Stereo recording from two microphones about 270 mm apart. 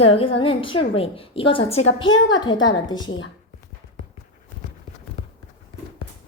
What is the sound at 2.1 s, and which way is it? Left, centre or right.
Speech, left.